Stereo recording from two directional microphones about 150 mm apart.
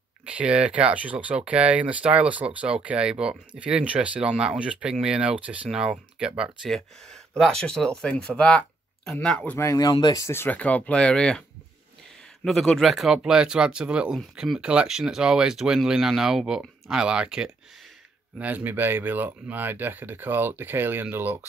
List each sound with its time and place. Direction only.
0.2 s speech: 10° right (ahead or behind)
9.6 s speech: 20° left (ahead or behind); by 11.4 s 5° left (ahead or behind)
12.4 s speech: centre (ahead or behind)